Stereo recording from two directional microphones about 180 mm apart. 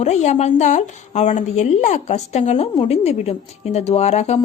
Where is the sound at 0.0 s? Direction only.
40° left (ahead or behind).